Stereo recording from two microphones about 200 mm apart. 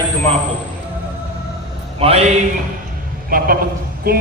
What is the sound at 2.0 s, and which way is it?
Speech, 30° right (ahead or behind).